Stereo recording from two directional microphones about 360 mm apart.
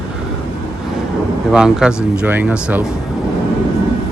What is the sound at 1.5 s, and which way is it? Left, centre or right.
Speech, centre.